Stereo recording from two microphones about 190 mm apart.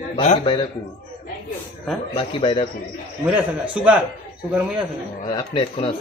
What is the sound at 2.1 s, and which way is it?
Speech, 30° left (ahead or behind).